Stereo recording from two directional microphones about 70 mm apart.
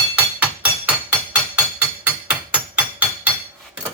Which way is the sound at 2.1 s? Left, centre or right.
Centre.